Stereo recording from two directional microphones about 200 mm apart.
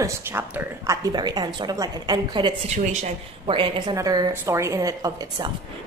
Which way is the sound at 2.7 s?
35° right (ahead or behind).